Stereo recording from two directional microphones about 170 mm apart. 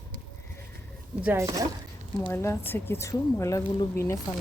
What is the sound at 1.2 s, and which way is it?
Speech, 15° right (ahead or behind).